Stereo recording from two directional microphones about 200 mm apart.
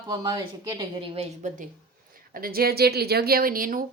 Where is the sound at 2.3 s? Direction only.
45° right (ahead or behind).